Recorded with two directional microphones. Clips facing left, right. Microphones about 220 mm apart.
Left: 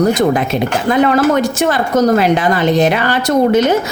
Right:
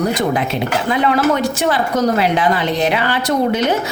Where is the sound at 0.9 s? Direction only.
45° left (ahead or behind).